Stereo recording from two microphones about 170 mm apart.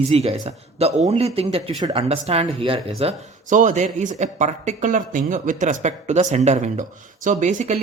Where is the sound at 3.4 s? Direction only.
50° right (ahead or behind).